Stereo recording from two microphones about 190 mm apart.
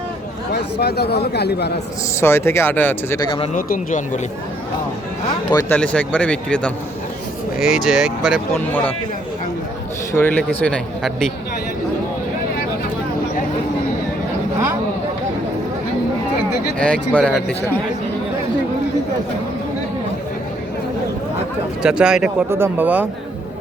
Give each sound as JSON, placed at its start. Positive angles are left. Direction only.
{"t": 0.5, "sound": "speech", "side_deg": 60}
{"t": 2.2, "sound": "speech", "side_deg": 15}
{"t": 3.2, "sound": "speech", "side_deg": 30}
{"t": 3.5, "sound": "speech", "side_deg": 40}
{"t": 5.5, "sound": "speech", "side_deg": 20}
{"t": 5.7, "sound": "speech", "side_deg": 10}
{"t": 8.5, "sound": "speech", "side_deg": 10}
{"t": 10.2, "sound": "speech", "side_deg": 10}
{"t": 17.1, "sound": "speech", "side_deg": 10}
{"t": 21.8, "sound": "speech", "side_deg": -5}